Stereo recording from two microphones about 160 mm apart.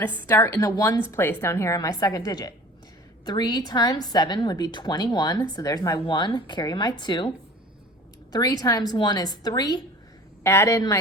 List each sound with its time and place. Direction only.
0.0 s a woman's voice: 10° left (ahead or behind); by 7.3 s 30° left (ahead or behind)
8.3 s a woman's voice: 25° left (ahead or behind)